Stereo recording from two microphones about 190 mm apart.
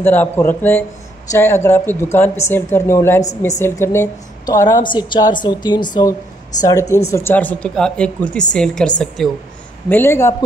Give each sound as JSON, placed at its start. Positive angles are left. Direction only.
{"t": 0.0, "sound": "a woman's voice", "side_deg": 10}